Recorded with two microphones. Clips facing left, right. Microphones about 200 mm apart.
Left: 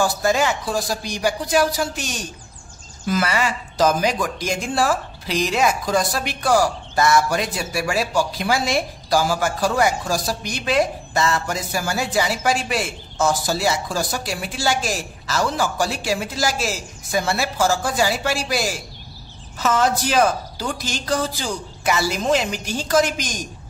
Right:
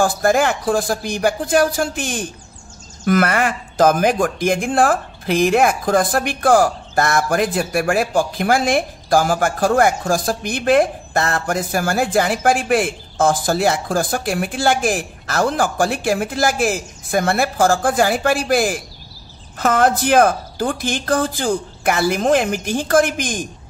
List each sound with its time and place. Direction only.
0.0 s speech: 50° right (ahead or behind)